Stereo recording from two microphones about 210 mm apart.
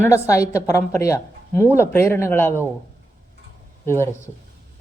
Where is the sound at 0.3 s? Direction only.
15° left (ahead or behind).